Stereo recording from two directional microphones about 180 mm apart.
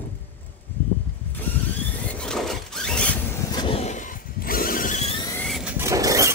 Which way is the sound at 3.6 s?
35° left (ahead or behind).